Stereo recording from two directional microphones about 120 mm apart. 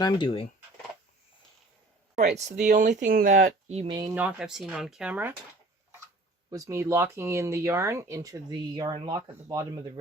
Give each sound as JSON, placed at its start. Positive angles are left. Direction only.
{"t": 0.0, "sound": "speech", "side_deg": 40}
{"t": 2.1, "sound": "speech", "side_deg": -75}
{"t": 2.6, "sound": "speech", "side_deg": -90}
{"t": 3.8, "sound": "speech", "side_deg": -35}
{"t": 4.1, "sound": "speech", "side_deg": -10}
{"t": 6.5, "sound": "speech", "side_deg": -25}